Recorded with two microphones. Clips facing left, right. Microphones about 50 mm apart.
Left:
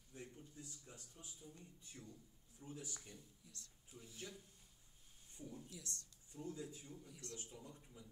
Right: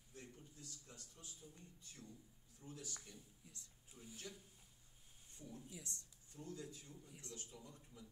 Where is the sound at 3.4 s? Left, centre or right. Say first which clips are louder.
Even; right.